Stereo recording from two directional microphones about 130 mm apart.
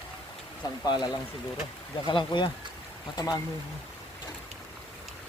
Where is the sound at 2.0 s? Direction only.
40° left (ahead or behind).